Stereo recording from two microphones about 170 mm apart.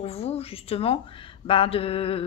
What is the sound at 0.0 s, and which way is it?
Speech, 35° left (ahead or behind).